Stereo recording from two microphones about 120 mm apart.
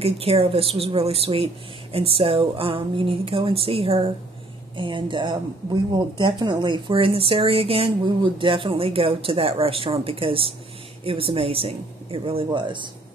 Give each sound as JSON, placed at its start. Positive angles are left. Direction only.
{"t": 0.0, "sound": "a woman's voice", "side_deg": -55}